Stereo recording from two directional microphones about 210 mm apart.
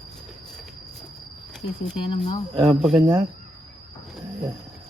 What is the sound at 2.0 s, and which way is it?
Speech, 25° left (ahead or behind).